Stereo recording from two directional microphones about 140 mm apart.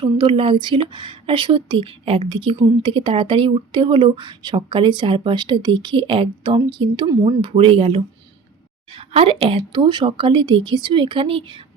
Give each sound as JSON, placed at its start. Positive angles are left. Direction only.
{"t": 0.0, "sound": "speech", "side_deg": -40}
{"t": 7.5, "sound": "speech", "side_deg": -40}